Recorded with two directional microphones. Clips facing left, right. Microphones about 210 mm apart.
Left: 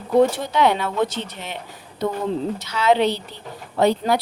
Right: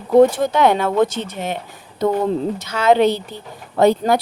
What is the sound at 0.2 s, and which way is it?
Speech, 50° right (ahead or behind).